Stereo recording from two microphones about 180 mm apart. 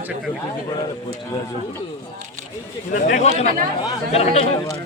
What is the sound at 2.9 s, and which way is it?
Speech, 45° left (ahead or behind).